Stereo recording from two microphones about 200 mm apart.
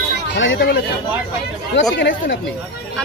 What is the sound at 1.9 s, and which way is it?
Speech, 65° left (ahead or behind).